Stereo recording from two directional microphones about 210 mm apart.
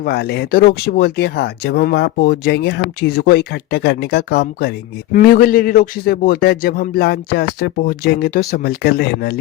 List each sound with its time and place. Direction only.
0.0 s speech: 50° left (ahead or behind)